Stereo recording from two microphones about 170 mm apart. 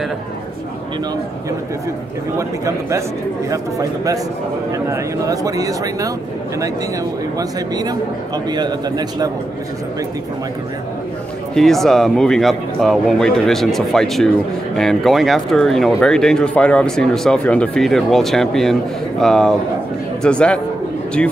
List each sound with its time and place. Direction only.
2.3 s a man's voice: 15° right (ahead or behind)
7.3 s speech: 25° right (ahead or behind)
11.5 s speech: centre (ahead or behind)